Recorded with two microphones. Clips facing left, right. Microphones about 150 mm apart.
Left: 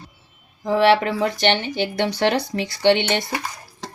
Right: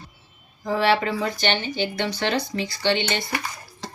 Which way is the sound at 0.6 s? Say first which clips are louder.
Left 4 dB; 70° left (ahead or behind).